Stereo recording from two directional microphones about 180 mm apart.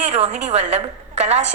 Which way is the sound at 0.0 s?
35° right (ahead or behind).